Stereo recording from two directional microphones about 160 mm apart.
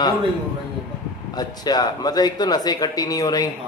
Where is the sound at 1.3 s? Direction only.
25° left (ahead or behind).